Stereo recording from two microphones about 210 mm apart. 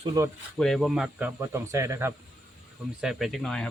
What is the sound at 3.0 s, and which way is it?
Speech, centre (ahead or behind).